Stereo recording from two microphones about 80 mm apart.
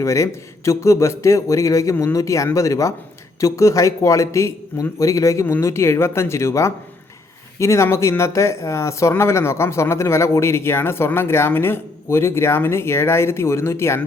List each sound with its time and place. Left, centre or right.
0.0 s speech: left